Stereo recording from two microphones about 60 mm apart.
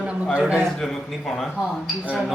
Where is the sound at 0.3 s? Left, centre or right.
Right.